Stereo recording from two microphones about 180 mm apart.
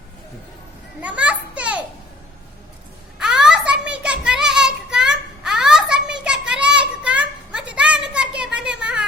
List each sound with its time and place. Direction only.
1.0 s children playing: 5° right (ahead or behind)
3.2 s child singing: 5° right (ahead or behind)
8.8 s a sound: 5° right (ahead or behind)